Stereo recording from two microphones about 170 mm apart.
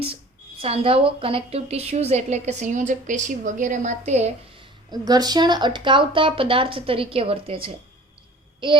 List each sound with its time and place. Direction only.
0.6 s a woman's voice: 35° right (ahead or behind)
4.9 s a woman's voice: 25° right (ahead or behind)
8.6 s child singing: 30° right (ahead or behind)